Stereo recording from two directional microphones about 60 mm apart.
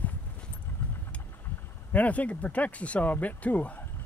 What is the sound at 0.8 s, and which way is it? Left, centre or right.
Vehicle, left.